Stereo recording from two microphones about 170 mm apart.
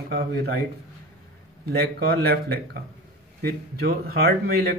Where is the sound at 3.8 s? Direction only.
65° right (ahead or behind).